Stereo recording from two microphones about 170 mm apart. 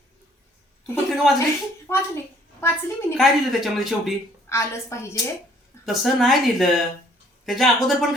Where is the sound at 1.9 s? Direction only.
15° left (ahead or behind).